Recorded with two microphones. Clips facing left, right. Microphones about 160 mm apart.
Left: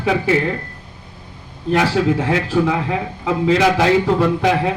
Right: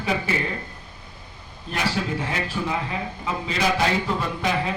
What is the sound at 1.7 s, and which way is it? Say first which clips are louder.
A man's voice: left 10 dB; 90° left.